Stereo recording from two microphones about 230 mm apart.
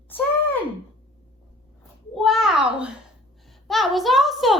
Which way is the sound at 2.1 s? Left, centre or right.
Centre.